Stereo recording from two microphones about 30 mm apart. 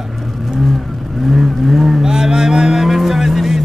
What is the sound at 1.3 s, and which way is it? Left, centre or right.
Vehicle, centre.